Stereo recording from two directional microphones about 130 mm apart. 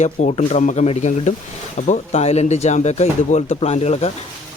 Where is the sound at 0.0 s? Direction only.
60° left (ahead or behind).